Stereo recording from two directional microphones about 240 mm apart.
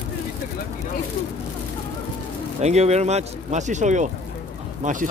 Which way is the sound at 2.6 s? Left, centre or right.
Right.